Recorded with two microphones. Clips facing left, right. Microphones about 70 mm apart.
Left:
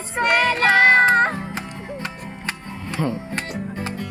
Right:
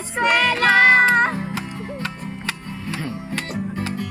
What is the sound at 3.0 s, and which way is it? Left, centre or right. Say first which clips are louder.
Music: left 2 dB; left.